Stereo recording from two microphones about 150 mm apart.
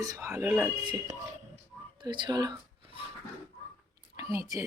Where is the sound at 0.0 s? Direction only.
20° right (ahead or behind).